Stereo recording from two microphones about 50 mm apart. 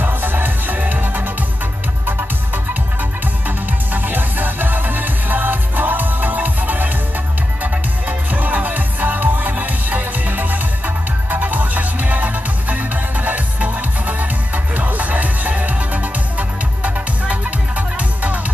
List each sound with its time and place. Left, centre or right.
0.0 s music: right
8.3 s music: right